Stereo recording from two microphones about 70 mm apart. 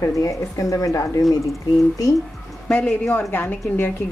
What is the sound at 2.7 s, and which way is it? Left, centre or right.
A man's voice, left.